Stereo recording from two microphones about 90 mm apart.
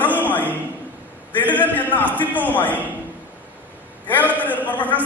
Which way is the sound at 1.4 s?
20° left (ahead or behind).